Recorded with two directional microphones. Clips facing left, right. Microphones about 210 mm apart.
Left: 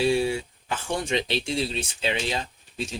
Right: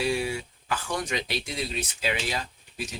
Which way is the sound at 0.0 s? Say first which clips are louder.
Left 5 dB; 30° left (ahead or behind).